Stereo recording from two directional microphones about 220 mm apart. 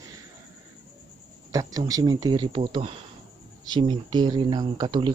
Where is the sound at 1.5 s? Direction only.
15° right (ahead or behind).